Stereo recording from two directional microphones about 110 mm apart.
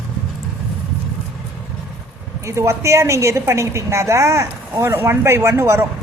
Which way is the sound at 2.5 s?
25° right (ahead or behind).